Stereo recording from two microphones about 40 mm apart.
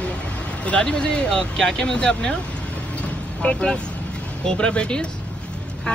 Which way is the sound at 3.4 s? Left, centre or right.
Left.